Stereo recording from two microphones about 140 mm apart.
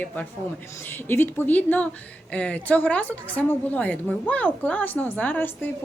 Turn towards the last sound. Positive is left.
turn(degrees=15)  # may be behind; listen again after turning